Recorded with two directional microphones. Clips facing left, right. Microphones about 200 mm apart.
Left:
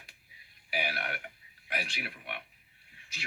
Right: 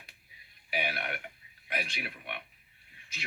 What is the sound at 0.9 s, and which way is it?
Burping, 15° right (ahead or behind).